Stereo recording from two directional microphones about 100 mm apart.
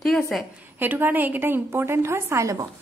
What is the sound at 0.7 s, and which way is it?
Speech, 20° right (ahead or behind).